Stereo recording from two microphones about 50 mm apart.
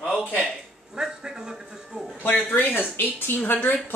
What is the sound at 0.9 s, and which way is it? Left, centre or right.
A man's voice, centre.